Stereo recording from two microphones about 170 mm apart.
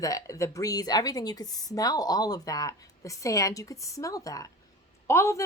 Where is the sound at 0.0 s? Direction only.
20° left (ahead or behind).